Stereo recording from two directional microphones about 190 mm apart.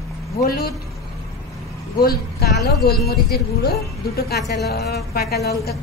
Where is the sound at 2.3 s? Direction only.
55° left (ahead or behind).